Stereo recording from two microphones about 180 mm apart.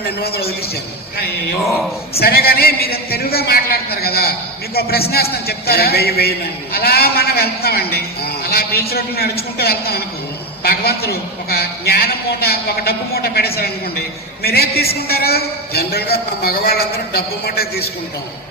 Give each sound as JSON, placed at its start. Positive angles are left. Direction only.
{"t": 2.1, "sound": "a man's voice", "side_deg": 60}